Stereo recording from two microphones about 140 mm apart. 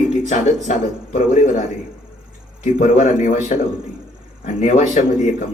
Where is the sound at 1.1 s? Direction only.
65° left (ahead or behind).